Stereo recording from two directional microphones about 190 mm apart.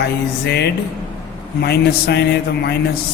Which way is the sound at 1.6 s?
60° left (ahead or behind).